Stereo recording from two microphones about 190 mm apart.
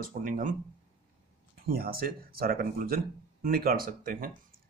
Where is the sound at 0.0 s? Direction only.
45° right (ahead or behind).